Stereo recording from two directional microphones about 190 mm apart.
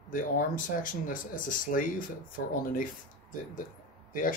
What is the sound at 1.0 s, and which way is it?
Speech, 45° left (ahead or behind).